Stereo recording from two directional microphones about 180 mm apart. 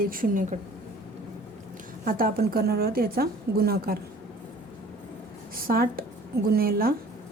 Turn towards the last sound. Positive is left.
turn(degrees=-55)  # may be behind; listen again after turning